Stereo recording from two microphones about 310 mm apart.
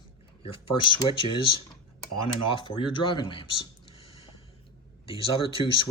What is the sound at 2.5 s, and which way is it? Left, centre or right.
Speech, centre.